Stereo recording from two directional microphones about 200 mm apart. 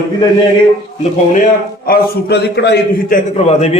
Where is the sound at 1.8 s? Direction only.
50° left (ahead or behind).